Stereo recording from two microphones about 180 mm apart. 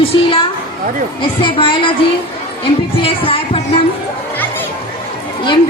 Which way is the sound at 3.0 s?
30° left (ahead or behind).